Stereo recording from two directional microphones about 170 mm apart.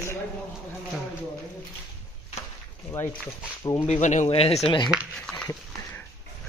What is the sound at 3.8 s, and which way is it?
Speech, 45° left (ahead or behind).